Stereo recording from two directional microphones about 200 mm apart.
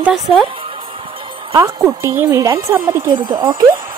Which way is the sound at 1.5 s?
15° right (ahead or behind).